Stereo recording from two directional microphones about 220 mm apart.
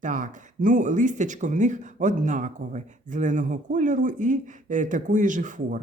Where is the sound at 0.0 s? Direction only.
35° right (ahead or behind).